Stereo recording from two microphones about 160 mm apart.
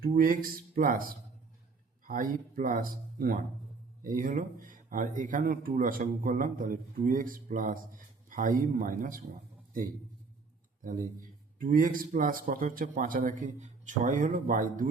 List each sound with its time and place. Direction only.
0.0 s speech: 60° right (ahead or behind)
10.8 s speech: 60° right (ahead or behind)